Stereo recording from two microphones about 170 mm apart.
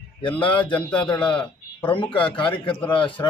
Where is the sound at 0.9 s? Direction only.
10° left (ahead or behind).